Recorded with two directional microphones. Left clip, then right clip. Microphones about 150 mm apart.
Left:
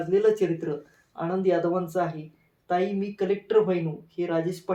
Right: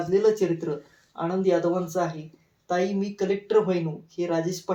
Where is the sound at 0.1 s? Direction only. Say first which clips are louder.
Even; 20° left (ahead or behind).